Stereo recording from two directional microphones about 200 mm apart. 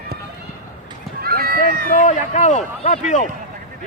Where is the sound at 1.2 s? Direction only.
50° right (ahead or behind).